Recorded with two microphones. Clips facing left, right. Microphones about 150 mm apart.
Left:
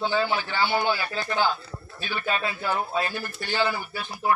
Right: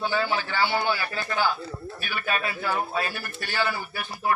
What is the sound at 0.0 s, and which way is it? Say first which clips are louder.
A man's voice: left 1 dB; 20° left (ahead or behind).